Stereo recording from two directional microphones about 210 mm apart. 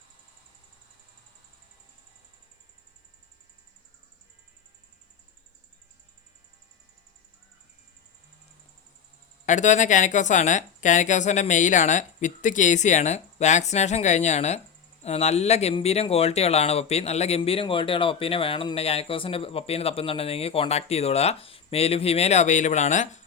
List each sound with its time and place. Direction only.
9.5 s a woman's voice: 35° left (ahead or behind)